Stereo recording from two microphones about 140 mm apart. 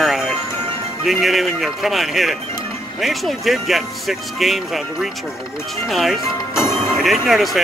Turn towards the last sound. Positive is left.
turn(degrees=0)  # may be behind; listen again after turning